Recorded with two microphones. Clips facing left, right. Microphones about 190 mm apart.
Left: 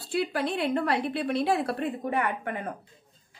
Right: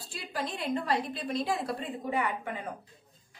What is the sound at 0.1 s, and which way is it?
A woman's voice, 65° left (ahead or behind).